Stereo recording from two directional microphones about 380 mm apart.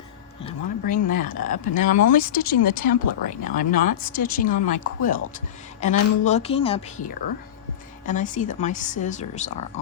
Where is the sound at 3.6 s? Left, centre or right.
Left.